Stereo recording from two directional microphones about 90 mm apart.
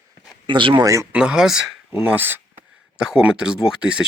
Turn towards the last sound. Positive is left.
turn(degrees=-10)  # may be behind; listen again after turning